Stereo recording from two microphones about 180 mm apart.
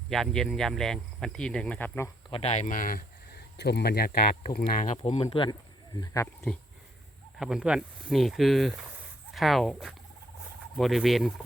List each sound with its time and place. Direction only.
0.1 s speech: centre (ahead or behind)
2.3 s speech: 35° left (ahead or behind)
3.6 s speech: 65° left (ahead or behind); by 6.5 s 20° left (ahead or behind)
7.3 s speech: 5° right (ahead or behind)